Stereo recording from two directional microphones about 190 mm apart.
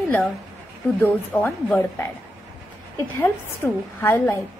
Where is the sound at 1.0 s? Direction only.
10° left (ahead or behind).